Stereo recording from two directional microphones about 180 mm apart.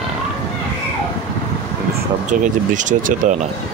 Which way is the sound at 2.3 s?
45° right (ahead or behind).